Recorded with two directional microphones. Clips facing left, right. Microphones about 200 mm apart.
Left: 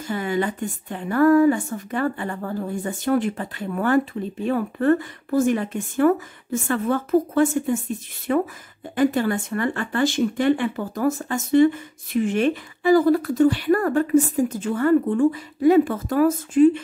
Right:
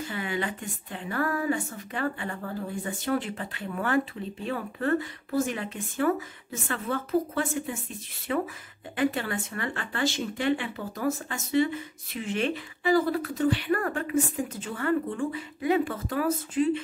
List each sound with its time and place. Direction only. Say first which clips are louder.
0.0 s speech: left 7 dB; 45° left (ahead or behind)